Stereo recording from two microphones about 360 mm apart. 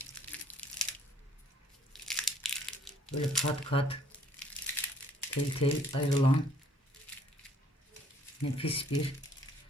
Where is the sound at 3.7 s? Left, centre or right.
Centre.